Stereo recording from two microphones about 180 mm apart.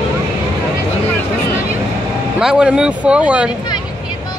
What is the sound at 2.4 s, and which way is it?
Speech, 5° right (ahead or behind).